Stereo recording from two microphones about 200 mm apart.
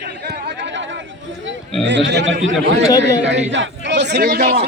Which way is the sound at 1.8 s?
60° right (ahead or behind).